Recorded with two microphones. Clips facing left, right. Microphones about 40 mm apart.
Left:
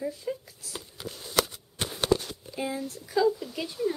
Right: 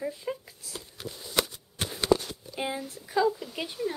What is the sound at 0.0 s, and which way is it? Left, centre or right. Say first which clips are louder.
Speech: left 1 dB; right.